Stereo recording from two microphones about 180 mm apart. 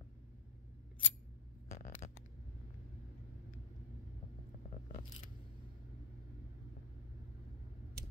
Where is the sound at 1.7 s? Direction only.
45° left (ahead or behind).